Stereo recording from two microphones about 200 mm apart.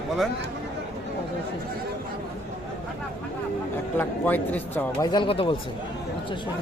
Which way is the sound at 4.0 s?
10° left (ahead or behind).